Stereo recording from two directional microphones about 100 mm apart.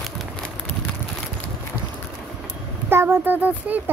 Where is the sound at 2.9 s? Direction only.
20° right (ahead or behind).